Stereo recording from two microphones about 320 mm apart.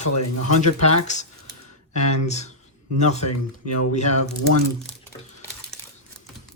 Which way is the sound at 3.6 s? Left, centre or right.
Left.